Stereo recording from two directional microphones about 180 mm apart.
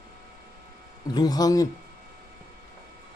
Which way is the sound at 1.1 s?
20° left (ahead or behind).